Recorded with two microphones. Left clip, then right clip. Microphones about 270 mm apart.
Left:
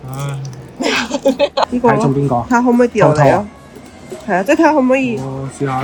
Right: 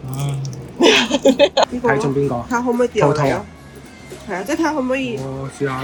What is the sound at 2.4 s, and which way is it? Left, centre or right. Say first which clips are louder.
Speech: left 8 dB; left.